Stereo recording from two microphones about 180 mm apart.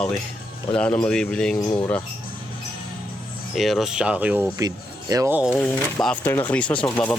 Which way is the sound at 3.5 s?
Centre (ahead or behind).